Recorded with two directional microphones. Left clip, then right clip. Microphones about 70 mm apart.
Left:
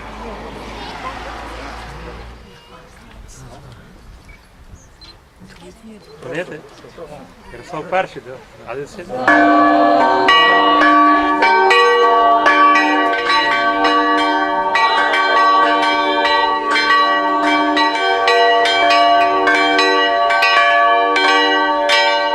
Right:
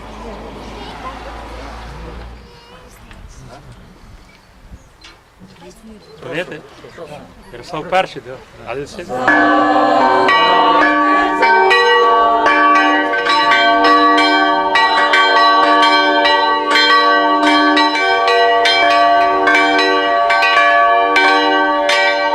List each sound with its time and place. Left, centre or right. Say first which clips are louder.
0.0 s a sound: left 1 dB; left; by 2.1 s centre
6.2 s speech: right 2 dB; right
9.2 s church bell: even; centre
9.6 s church bell: even; right
10.2 s church bell: even; centre
13.2 s church bell: right 2 dB; centre
13.5 s church bell: right 4 dB; centre
14.2 s church bell: right 4 dB; centre
15.1 s change ringing: right 2 dB; centre
15.8 s bell: right 4 dB; centre
16.5 s church bell: right 3 dB; centre
18.3 s church bell: left 1 dB; centre
18.6 s church bell: right 2 dB; centre
18.9 s church bell: right 1 dB; centre